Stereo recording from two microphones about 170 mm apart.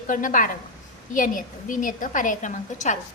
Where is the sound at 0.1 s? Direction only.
50° left (ahead or behind).